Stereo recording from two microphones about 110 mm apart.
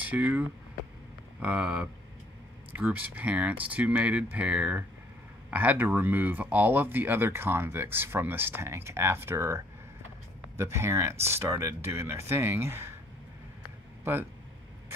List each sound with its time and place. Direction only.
0.0 s speech: 15° right (ahead or behind)
10.6 s speech: 25° right (ahead or behind)